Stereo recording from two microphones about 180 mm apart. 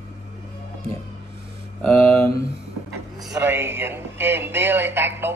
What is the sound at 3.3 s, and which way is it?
Speech, 10° right (ahead or behind).